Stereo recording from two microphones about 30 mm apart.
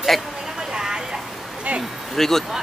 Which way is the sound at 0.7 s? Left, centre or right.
Right.